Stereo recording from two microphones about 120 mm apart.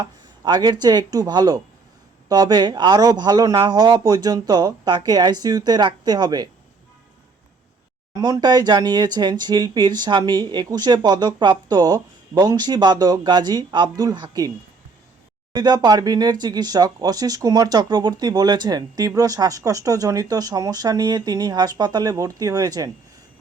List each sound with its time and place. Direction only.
0.0 s speech: 35° right (ahead or behind)
8.2 s speech: 35° right (ahead or behind)
15.5 s speech: 35° right (ahead or behind)